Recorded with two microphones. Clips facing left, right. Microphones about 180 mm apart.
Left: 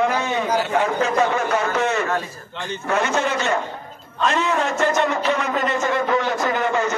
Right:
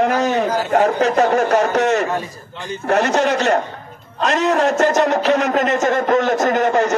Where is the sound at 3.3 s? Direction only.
40° right (ahead or behind).